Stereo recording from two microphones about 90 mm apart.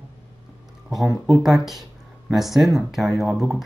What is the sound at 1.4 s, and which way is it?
Speech, centre (ahead or behind).